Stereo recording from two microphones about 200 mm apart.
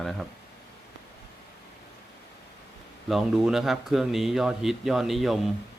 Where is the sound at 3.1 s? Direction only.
Centre (ahead or behind).